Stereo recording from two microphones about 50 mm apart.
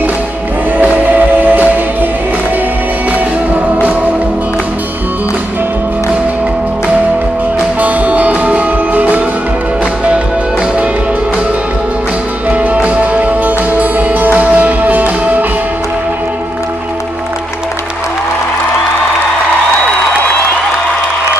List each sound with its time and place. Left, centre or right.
0.7 s music: right
7.8 s music: right
12.4 s music: right